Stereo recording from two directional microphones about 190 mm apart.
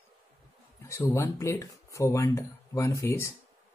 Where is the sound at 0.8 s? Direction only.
15° left (ahead or behind).